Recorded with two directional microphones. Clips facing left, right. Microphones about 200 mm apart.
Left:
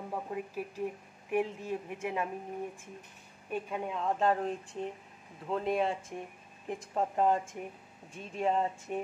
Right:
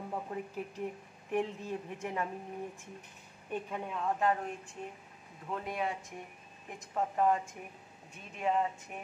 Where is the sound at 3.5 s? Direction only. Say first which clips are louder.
Left 2 dB; 20° left (ahead or behind).